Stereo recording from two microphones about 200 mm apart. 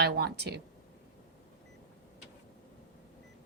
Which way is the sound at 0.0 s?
55° right (ahead or behind).